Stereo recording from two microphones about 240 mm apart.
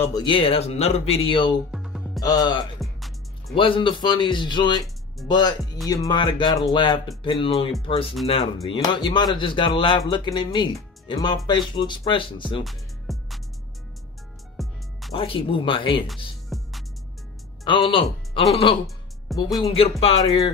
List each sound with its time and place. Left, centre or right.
0.0 s speech: centre
1.7 s music: centre
2.1 s speech: centre
2.8 s music: centre
3.5 s speech: left
12.6 s music: centre
14.6 s music: centre
15.1 s speech: left
16.4 s music: centre
17.6 s speech: centre
19.3 s speech: centre
19.6 s speech: left